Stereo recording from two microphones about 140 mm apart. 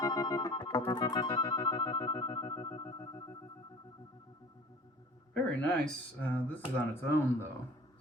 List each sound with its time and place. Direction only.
0.0 s music: 25° left (ahead or behind)
5.3 s speech: 5° left (ahead or behind)